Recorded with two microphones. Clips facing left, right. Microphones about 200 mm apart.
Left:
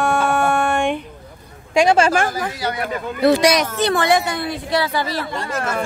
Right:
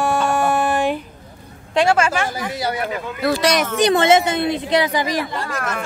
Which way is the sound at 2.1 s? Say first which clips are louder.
Left 3 dB; 50° left (ahead or behind).